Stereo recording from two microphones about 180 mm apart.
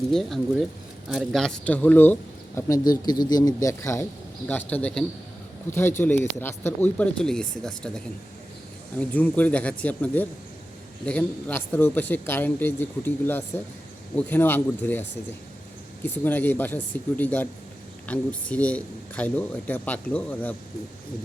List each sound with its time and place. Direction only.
0.1 s speech: centre (ahead or behind); by 4.0 s 15° left (ahead or behind)
4.7 s speech: 5° left (ahead or behind)
16.0 s speech: 10° left (ahead or behind)